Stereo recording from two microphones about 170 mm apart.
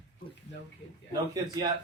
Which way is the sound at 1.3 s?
25° right (ahead or behind).